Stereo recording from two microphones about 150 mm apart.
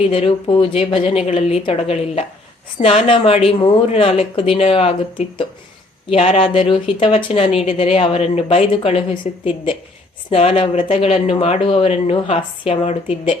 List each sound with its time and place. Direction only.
0.0 s a woman's voice: 40° left (ahead or behind)